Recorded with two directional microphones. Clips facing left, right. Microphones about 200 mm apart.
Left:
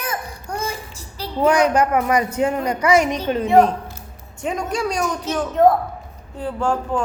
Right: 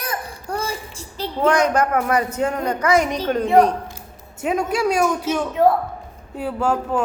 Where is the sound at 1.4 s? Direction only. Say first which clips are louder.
Left 1 dB; 10° left (ahead or behind).